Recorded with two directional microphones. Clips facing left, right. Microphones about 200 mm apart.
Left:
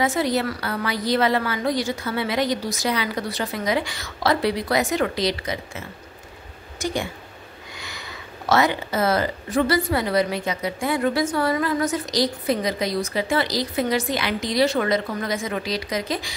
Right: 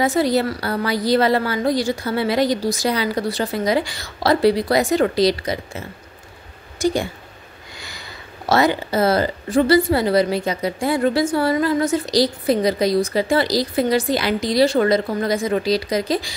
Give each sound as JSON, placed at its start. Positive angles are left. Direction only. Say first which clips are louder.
{"t": 0.0, "sound": "a woman's voice", "louder": "right 4 dB", "side_deg": -35}
{"t": 6.8, "sound": "speech", "louder": "right 6 dB", "side_deg": -35}
{"t": 8.5, "sound": "a woman's voice", "louder": "right 3 dB", "side_deg": -35}